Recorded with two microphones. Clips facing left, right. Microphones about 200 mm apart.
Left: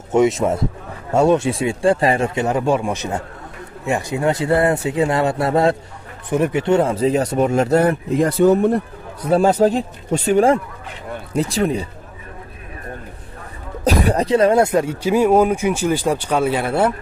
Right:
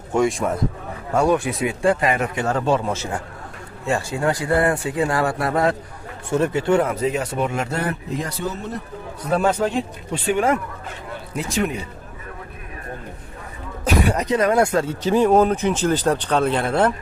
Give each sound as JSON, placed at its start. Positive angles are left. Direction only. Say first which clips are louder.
{"t": 0.1, "sound": "speech", "louder": "left 4 dB", "side_deg": 20}
{"t": 9.3, "sound": "speech", "louder": "left 5 dB", "side_deg": 35}
{"t": 13.8, "sound": "speech", "louder": "left 3 dB", "side_deg": 35}